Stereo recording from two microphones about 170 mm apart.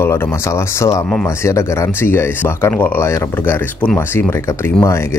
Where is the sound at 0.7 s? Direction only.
20° left (ahead or behind).